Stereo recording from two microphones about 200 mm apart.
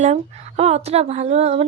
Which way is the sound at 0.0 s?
35° right (ahead or behind).